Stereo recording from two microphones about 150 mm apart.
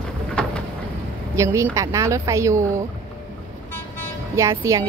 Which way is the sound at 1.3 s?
20° right (ahead or behind).